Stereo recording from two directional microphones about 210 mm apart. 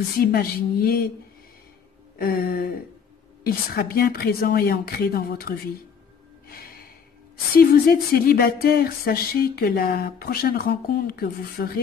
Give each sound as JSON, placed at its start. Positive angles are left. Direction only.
{"t": 0.2, "sound": "speech", "side_deg": 45}
{"t": 2.1, "sound": "speech", "side_deg": 45}
{"t": 7.5, "sound": "speech", "side_deg": 45}